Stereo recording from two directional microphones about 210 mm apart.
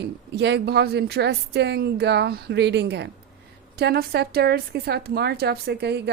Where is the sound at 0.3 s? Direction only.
55° right (ahead or behind).